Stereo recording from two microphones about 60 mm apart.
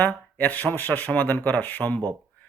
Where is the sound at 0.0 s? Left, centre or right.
Left.